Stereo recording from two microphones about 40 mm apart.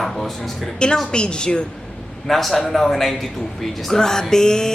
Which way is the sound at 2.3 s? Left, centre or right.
Centre.